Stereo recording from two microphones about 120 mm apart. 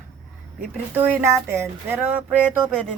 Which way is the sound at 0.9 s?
15° right (ahead or behind).